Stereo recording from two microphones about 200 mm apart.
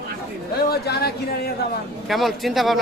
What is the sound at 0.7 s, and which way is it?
Speech, 50° left (ahead or behind).